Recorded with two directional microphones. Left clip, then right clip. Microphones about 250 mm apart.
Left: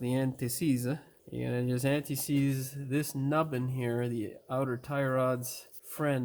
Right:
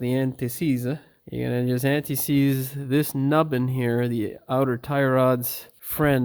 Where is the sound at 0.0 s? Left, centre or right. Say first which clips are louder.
Right 7 dB; right.